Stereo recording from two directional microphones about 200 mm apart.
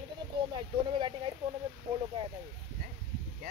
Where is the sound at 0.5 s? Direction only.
25° right (ahead or behind).